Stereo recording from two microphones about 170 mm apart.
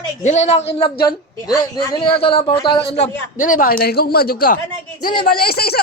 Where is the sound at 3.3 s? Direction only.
50° left (ahead or behind).